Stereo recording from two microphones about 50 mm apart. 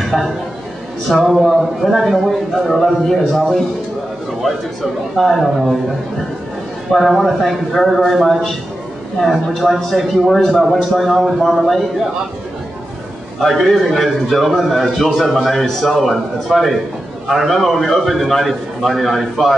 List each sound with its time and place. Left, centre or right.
0.1 s speech: centre
1.1 s speech: centre
5.1 s speech: centre
6.9 s speech: centre
13.4 s speech: centre